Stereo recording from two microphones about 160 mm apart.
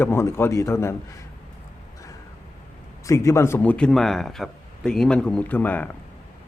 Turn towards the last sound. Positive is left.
turn(degrees=10)  # may be behind; listen again after turning